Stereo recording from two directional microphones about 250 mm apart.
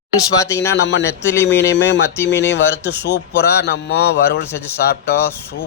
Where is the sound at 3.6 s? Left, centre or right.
Left.